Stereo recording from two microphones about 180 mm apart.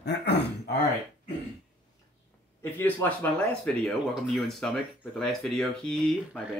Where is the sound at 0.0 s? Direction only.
70° left (ahead or behind).